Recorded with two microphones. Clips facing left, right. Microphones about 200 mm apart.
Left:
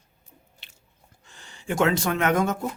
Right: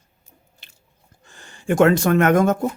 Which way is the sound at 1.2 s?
50° right (ahead or behind).